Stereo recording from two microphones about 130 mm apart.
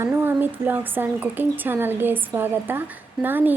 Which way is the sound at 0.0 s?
15° right (ahead or behind).